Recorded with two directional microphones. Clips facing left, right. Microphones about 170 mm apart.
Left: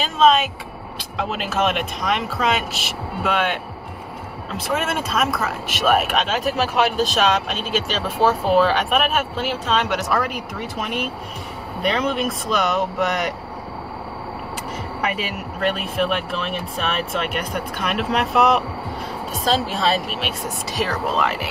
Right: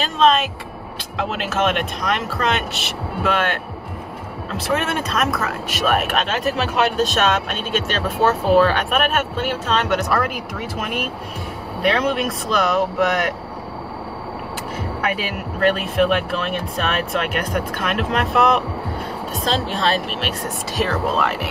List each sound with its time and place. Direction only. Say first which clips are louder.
0.0 s speech: even; centre (ahead or behind)
15.0 s speech: right 1 dB; centre (ahead or behind)